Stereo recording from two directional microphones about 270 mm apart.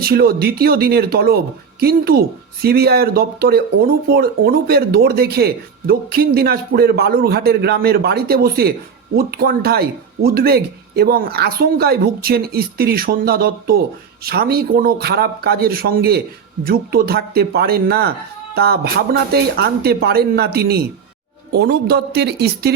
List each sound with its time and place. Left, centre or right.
0.0 s speech: right